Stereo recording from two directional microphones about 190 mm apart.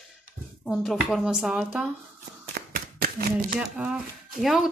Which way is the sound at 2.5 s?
50° right (ahead or behind).